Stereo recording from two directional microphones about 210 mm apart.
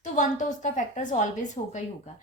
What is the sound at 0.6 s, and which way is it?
A woman's voice, 35° left (ahead or behind).